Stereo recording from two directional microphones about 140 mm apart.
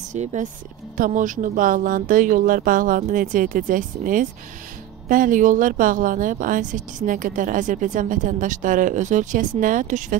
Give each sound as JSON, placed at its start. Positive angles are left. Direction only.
{"t": 0.1, "sound": "speech", "side_deg": -55}
{"t": 0.9, "sound": "speech", "side_deg": -70}